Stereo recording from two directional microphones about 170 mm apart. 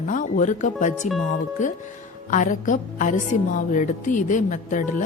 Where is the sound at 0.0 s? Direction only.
50° left (ahead or behind).